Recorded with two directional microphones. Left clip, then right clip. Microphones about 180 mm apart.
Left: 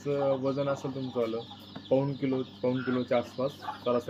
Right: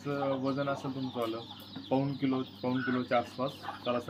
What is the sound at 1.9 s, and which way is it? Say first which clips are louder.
Speech: left 4 dB; 25° left (ahead or behind).